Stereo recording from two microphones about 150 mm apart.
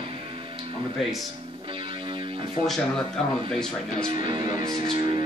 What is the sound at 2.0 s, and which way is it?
Music, 30° right (ahead or behind).